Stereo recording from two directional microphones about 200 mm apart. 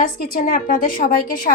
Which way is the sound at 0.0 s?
45° left (ahead or behind).